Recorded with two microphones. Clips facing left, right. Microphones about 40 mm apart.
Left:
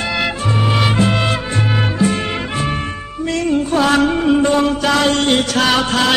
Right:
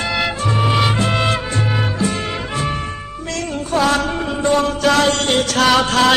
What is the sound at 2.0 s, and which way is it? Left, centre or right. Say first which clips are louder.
Music: left 3 dB; left.